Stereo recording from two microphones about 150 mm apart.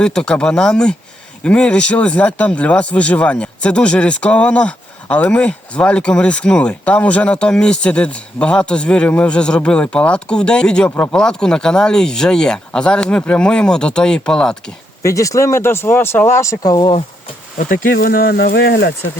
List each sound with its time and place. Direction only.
0.0 s speech: 5° left (ahead or behind)
15.0 s speech: 20° left (ahead or behind)
17.6 s speech: 70° left (ahead or behind); by 18.9 s 90° left